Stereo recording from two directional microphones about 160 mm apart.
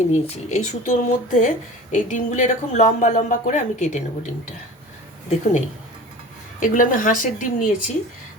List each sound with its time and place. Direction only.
0.1 s speech: 45° left (ahead or behind)
5.3 s a woman's voice: 50° left (ahead or behind)